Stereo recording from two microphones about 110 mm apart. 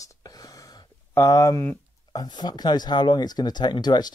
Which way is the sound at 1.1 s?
30° left (ahead or behind).